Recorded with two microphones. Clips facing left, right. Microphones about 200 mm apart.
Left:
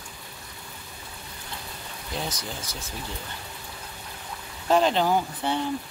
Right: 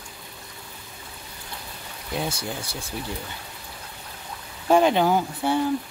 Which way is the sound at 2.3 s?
10° right (ahead or behind).